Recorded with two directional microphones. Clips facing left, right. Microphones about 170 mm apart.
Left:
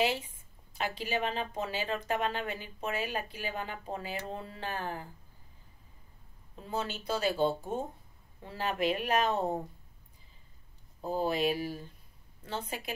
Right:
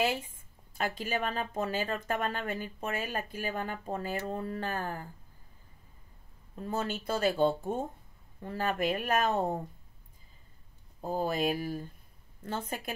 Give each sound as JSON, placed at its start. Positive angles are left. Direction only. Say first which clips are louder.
{"t": 0.0, "sound": "speech", "louder": "even", "side_deg": -50}
{"t": 6.6, "sound": "speech", "louder": "right 2 dB", "side_deg": -50}
{"t": 11.1, "sound": "speech", "louder": "even", "side_deg": -45}